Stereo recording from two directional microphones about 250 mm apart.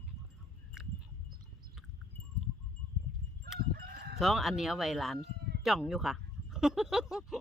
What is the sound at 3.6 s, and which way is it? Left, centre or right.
Crowing, right.